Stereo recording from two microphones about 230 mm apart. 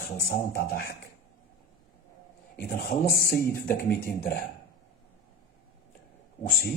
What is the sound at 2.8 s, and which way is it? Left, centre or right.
Speech, left.